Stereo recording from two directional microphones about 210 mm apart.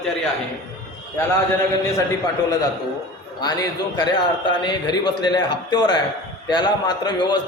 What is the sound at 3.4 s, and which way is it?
A man's voice, 20° left (ahead or behind).